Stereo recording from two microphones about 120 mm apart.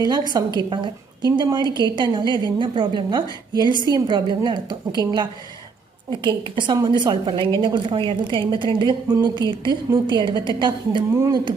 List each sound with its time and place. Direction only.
0.0 s a woman's voice: 35° right (ahead or behind)